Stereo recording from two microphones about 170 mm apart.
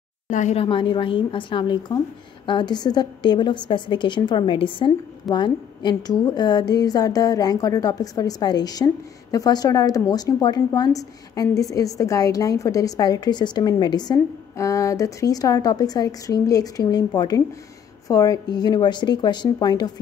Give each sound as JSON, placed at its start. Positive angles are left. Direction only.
{"t": 0.3, "sound": "a woman's voice", "side_deg": 45}